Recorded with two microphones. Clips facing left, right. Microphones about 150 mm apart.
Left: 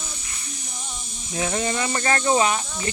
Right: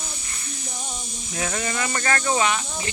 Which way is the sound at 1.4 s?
25° left (ahead or behind).